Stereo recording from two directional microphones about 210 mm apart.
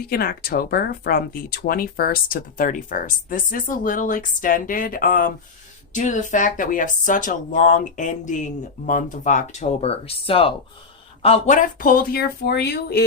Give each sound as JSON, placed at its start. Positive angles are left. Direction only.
{"t": 0.0, "sound": "speech", "side_deg": 45}